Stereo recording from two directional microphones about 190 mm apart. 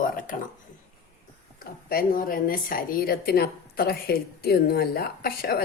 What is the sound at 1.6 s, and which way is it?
A woman's voice, 50° left (ahead or behind).